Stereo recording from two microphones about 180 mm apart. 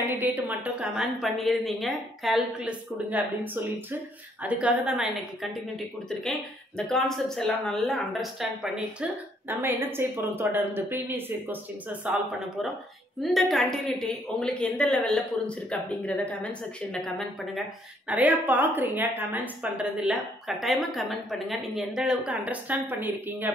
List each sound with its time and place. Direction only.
0.2 s a woman's voice: 10° right (ahead or behind)
6.9 s a woman's voice: centre (ahead or behind)